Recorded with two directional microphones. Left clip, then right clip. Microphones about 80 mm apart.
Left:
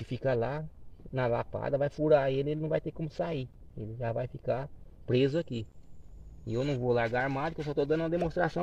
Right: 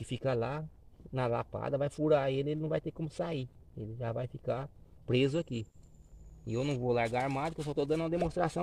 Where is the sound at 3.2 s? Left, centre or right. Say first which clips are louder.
Left 3 dB; right.